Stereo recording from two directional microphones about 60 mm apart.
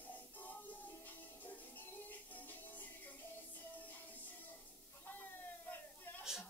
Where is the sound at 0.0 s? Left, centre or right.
Left.